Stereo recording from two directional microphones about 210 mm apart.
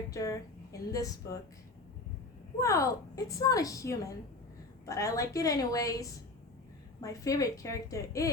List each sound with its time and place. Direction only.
0.1 s a woman's voice: 15° left (ahead or behind)
2.6 s a woman's voice: 15° left (ahead or behind)